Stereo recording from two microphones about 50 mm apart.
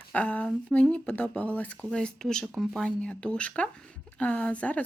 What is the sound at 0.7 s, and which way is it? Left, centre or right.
Speech, left.